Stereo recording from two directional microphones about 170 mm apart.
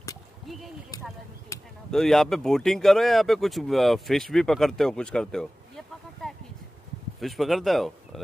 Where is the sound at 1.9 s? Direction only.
Centre (ahead or behind).